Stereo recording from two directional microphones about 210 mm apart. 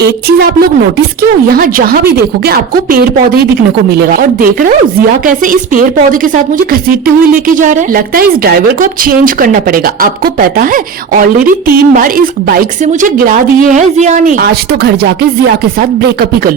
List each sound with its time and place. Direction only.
0.0 s a woman's voice: 50° right (ahead or behind)
1.5 s a woman's voice: 45° right (ahead or behind)
7.4 s a woman's voice: 40° right (ahead or behind)